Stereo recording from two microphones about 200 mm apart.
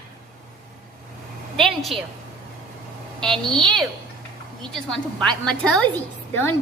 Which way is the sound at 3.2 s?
5° left (ahead or behind).